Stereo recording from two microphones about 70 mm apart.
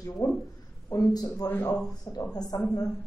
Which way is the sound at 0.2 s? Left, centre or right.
Left.